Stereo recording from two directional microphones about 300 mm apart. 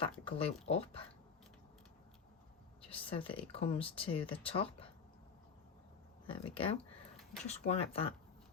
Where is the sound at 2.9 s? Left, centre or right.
Centre.